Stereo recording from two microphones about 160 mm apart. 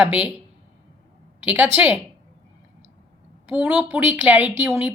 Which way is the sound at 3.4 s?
10° right (ahead or behind).